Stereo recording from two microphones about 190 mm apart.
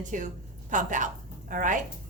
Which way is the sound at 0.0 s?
40° right (ahead or behind).